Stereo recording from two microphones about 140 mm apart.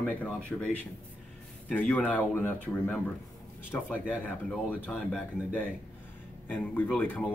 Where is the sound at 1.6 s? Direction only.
10° left (ahead or behind).